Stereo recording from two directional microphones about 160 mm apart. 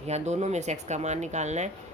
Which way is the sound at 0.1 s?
45° right (ahead or behind).